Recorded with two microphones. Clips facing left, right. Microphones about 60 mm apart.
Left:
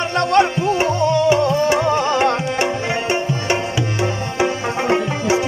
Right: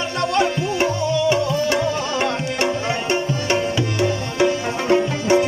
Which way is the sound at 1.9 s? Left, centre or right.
Left.